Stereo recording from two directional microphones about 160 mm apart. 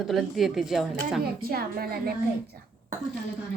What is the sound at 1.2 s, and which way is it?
Speech, 70° right (ahead or behind).